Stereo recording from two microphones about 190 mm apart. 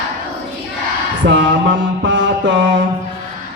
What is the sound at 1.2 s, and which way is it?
Mantra, 70° right (ahead or behind).